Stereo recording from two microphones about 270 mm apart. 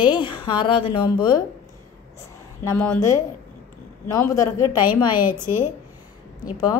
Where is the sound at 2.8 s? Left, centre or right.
Centre.